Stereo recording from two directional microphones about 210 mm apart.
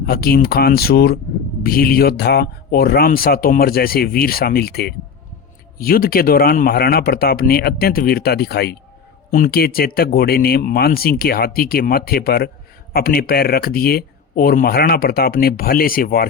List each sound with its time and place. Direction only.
0.0 s speech: 45° left (ahead or behind)